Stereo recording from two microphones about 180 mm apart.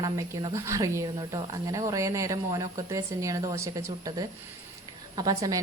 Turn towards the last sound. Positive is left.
turn(degrees=-20)  # may be behind; listen again after turning